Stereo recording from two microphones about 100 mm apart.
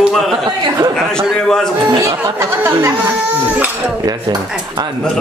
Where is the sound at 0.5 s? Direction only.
45° right (ahead or behind).